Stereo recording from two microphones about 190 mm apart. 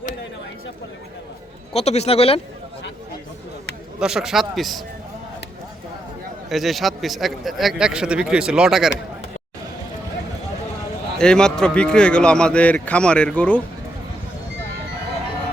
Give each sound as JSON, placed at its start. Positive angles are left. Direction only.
{"t": 1.7, "sound": "speech", "side_deg": 35}
{"t": 4.0, "sound": "a man's voice", "side_deg": -5}
{"t": 6.5, "sound": "a man's voice", "side_deg": 0}
{"t": 11.2, "sound": "a man's voice", "side_deg": 5}